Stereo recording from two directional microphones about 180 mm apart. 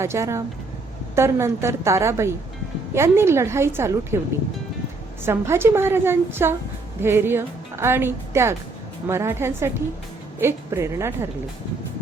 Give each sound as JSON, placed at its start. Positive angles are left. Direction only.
{"t": 0.0, "sound": "speech", "side_deg": -15}
{"t": 5.2, "sound": "speech", "side_deg": -15}